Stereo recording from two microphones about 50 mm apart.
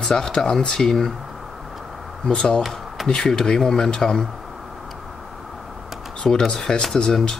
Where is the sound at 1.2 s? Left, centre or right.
Centre.